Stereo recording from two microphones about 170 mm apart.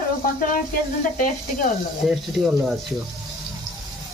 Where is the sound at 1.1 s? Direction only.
55° left (ahead or behind).